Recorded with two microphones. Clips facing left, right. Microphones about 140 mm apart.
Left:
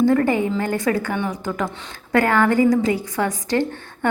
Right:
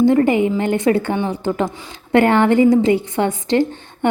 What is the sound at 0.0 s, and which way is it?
A woman's voice, 20° right (ahead or behind).